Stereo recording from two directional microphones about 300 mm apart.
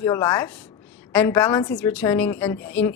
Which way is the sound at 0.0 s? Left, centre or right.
Centre.